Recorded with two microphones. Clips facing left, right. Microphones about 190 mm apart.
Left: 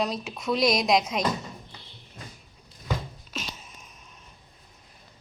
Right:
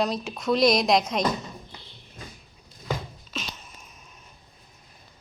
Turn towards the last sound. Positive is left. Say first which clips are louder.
# right 1 dB
turn(degrees=10)  # may be behind; listen again after turning